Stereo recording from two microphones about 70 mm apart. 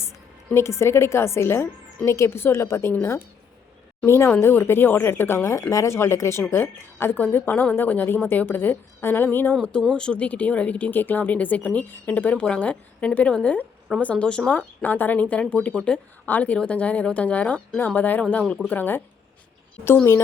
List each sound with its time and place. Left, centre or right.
0.5 s a woman's voice: left
4.0 s a woman's voice: left
5.4 s a woman's voice: left
9.9 s speech: centre
14.6 s speech: left
18.7 s speech: left